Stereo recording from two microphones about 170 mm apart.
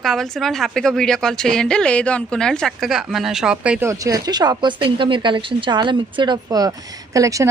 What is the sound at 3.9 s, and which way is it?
Speech, 20° right (ahead or behind).